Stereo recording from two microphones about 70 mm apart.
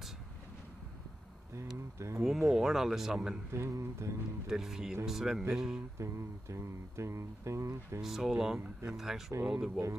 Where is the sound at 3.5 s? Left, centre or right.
Right.